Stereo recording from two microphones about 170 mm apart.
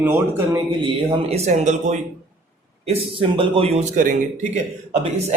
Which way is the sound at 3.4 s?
35° right (ahead or behind).